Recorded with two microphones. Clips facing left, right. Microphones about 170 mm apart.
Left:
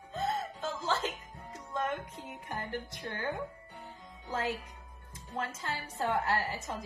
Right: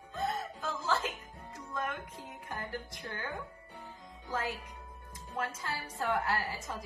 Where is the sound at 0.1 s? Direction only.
25° left (ahead or behind).